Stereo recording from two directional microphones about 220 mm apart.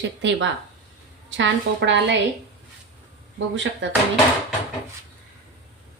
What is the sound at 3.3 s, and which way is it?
Speech, 55° right (ahead or behind).